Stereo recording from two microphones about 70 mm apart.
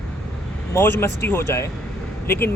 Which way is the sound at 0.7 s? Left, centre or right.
Left.